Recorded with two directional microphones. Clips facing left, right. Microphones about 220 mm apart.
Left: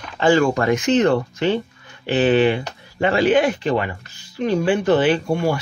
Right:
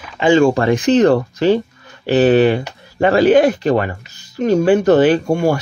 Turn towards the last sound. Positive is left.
turn(degrees=-45)  # may be behind; listen again after turning